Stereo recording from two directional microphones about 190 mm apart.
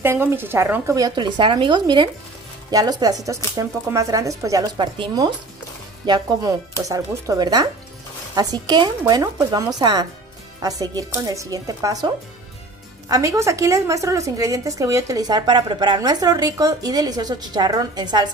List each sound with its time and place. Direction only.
0.0 s a woman's voice: 10° right (ahead or behind)
13.1 s a woman's voice: 15° right (ahead or behind)